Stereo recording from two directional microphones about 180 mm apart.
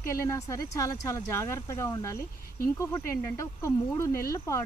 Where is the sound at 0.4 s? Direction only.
15° left (ahead or behind).